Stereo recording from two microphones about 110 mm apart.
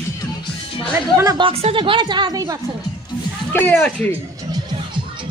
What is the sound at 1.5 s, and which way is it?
A woman's voice, 60° right (ahead or behind).